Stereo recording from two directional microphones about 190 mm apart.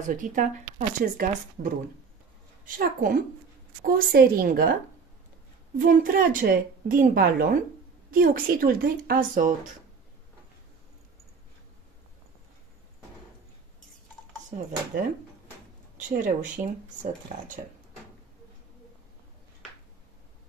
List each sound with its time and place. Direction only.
0.0 s a woman's voice: 45° right (ahead or behind)
2.7 s a woman's voice: 45° right (ahead or behind)
5.8 s a woman's voice: 45° right (ahead or behind)
14.9 s a woman's voice: 45° right (ahead or behind)